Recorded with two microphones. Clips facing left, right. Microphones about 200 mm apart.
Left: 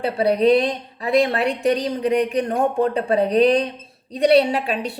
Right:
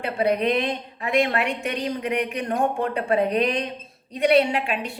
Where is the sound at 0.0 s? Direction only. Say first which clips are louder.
Left 5 dB; 35° left (ahead or behind).